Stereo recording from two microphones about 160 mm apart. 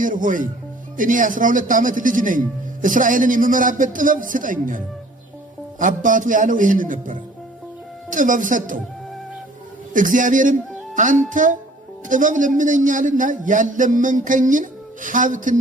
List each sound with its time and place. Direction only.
0.0 s a man's voice: 55° right (ahead or behind)
5.8 s a man's voice: 55° right (ahead or behind)
9.9 s a man's voice: 55° right (ahead or behind)